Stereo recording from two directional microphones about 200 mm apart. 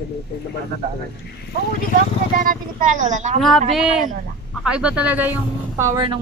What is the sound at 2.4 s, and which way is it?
Speech, 40° right (ahead or behind).